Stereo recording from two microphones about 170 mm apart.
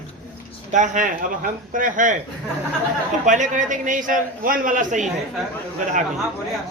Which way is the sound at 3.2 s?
45° right (ahead or behind).